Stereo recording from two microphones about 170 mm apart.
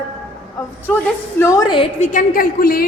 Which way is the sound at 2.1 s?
55° left (ahead or behind).